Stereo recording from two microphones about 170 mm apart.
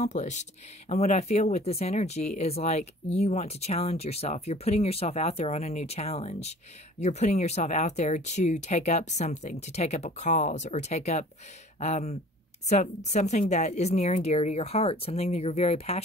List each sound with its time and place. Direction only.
0.0 s speech: 45° left (ahead or behind)